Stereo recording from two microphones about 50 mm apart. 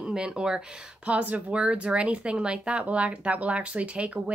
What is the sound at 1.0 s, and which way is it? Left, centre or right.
Speech, right.